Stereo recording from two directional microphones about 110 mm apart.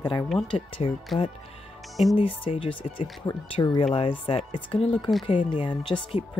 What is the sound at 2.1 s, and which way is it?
Speech, 55° left (ahead or behind).